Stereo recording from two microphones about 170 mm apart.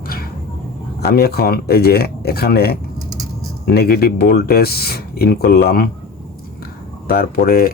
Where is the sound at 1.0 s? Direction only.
65° left (ahead or behind).